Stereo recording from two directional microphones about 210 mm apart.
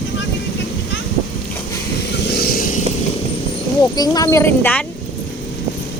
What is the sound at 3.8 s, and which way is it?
Speech, 20° left (ahead or behind).